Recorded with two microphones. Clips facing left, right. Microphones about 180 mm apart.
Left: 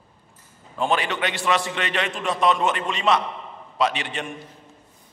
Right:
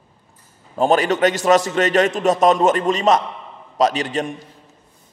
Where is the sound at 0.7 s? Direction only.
40° right (ahead or behind).